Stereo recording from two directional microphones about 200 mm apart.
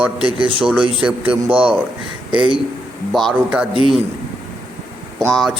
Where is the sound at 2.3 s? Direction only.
25° right (ahead or behind).